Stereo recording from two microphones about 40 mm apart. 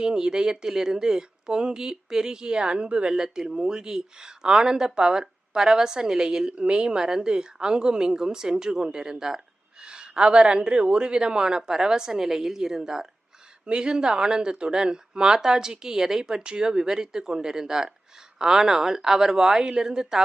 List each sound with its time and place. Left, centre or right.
0.0 s speech: centre